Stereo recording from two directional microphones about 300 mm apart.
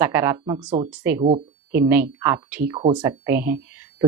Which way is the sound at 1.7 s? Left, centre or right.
Centre.